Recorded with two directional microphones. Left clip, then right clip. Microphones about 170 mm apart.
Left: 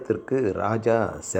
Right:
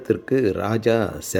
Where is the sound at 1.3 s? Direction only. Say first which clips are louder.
Right 3 dB; 60° right (ahead or behind).